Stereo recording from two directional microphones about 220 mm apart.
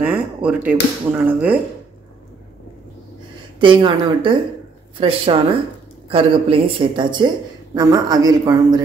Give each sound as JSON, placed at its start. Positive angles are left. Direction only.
{"t": 0.0, "sound": "speech", "side_deg": -5}
{"t": 3.5, "sound": "speech", "side_deg": -20}